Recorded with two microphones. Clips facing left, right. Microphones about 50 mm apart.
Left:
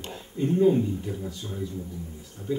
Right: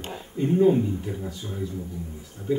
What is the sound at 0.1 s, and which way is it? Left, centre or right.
Speech, centre.